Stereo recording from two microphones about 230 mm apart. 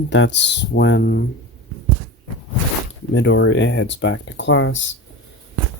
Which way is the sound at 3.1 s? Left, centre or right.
Left.